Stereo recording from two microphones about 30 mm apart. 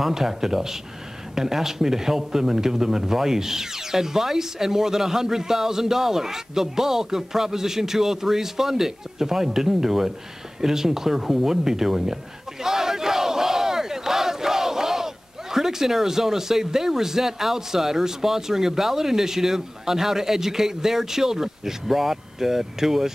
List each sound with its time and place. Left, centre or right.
0.1 s a man's voice: centre
12.6 s battle cry: centre
15.5 s a man's voice: centre